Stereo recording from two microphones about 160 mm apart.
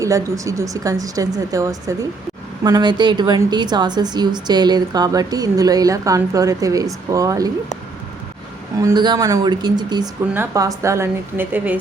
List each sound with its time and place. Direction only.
0.0 s a woman's voice: 20° right (ahead or behind)
8.8 s a woman's voice: 25° right (ahead or behind); by 11.8 s 10° right (ahead or behind)